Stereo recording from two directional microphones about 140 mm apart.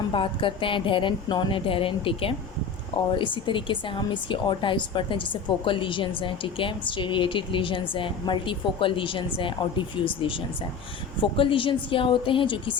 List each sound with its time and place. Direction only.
0.1 s a woman's voice: 40° left (ahead or behind)